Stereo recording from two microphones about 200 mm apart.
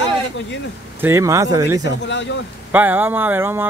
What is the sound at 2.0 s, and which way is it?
Speech, 60° left (ahead or behind).